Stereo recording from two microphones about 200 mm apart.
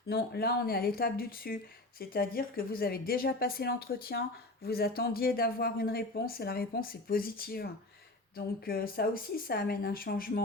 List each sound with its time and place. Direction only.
0.1 s speech: 50° left (ahead or behind)